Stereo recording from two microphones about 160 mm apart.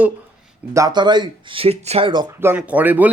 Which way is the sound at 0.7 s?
20° right (ahead or behind).